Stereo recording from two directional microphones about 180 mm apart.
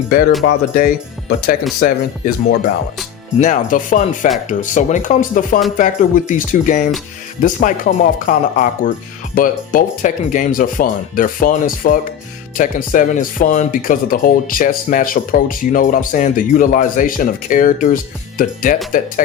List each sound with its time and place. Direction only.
0.4 s speech: 50° left (ahead or behind)